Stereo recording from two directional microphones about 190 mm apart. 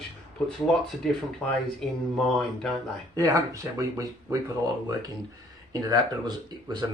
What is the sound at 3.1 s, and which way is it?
Speech, 15° right (ahead or behind).